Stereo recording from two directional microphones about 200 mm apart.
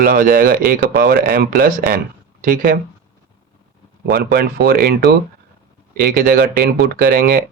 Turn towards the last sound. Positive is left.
turn(degrees=-45)  # may be behind; listen again after turning